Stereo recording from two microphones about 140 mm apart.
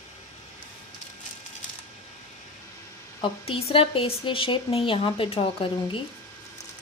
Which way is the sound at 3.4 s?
40° left (ahead or behind).